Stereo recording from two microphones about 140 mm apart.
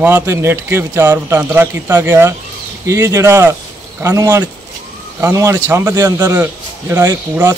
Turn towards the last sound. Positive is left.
turn(degrees=-15)  # may be behind; listen again after turning